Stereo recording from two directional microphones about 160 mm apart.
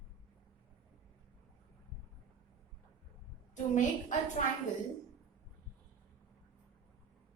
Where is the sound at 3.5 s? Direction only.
50° left (ahead or behind).